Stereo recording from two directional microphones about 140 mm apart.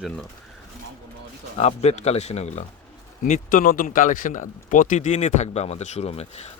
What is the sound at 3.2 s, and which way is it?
Speech, 65° left (ahead or behind).